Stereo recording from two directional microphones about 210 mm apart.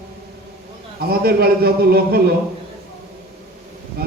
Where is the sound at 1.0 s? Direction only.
45° right (ahead or behind).